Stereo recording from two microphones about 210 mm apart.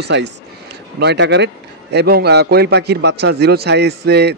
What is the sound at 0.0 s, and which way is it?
A man's voice, 55° right (ahead or behind).